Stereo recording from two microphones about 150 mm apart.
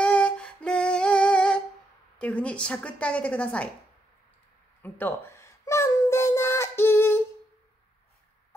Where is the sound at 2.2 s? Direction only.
10° left (ahead or behind).